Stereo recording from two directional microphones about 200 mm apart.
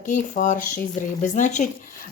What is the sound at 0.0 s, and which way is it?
Speech, 40° left (ahead or behind).